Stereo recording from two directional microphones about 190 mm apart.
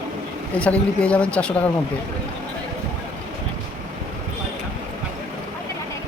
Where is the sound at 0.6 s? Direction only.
5° left (ahead or behind).